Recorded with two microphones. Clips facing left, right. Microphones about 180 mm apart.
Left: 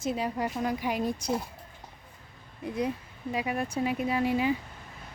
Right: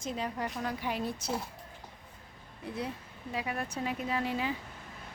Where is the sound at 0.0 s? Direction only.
10° left (ahead or behind).